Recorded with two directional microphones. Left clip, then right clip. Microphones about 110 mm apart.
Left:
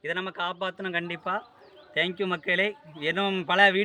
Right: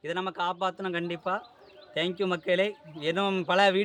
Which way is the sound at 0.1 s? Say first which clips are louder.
Right 1 dB; 40° right (ahead or behind).